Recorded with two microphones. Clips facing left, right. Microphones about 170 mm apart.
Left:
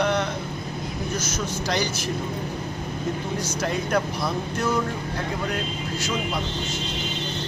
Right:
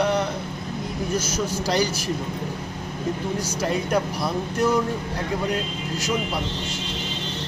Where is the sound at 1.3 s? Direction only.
35° right (ahead or behind).